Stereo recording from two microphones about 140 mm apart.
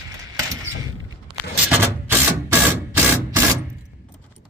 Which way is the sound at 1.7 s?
15° right (ahead or behind).